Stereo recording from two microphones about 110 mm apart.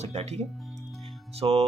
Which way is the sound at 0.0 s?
80° right.